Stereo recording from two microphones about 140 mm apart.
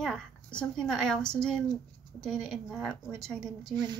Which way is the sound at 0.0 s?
5° left (ahead or behind).